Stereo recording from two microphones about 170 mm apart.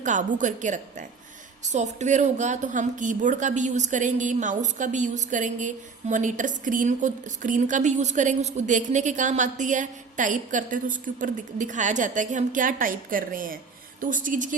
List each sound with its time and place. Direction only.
0.0 s a woman's voice: 45° right (ahead or behind)